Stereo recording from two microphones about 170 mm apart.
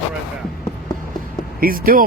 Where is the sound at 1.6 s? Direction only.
55° right (ahead or behind).